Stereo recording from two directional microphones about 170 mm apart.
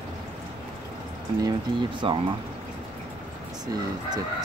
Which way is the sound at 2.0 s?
30° right (ahead or behind).